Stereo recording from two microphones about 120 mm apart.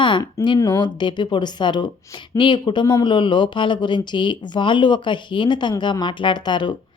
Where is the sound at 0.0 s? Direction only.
40° left (ahead or behind).